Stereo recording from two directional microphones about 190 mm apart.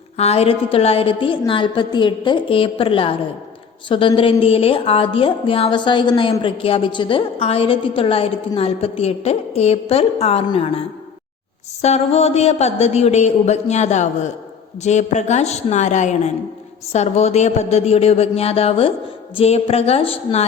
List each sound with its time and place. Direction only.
0.2 s a woman's voice: 35° left (ahead or behind)